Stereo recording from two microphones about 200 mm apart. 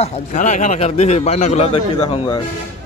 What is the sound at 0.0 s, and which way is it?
A man's voice, 40° left (ahead or behind).